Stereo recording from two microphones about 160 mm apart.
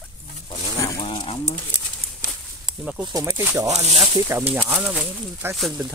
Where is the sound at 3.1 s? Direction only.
20° right (ahead or behind).